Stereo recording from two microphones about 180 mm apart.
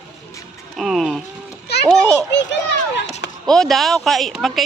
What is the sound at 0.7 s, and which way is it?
Speech, centre (ahead or behind).